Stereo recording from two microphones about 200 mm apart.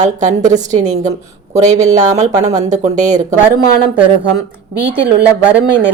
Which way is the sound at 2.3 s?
20° right (ahead or behind).